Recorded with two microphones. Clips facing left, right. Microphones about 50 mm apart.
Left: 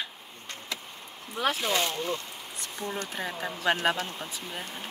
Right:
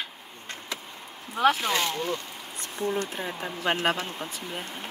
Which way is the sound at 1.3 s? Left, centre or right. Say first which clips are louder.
Right 4 dB; right.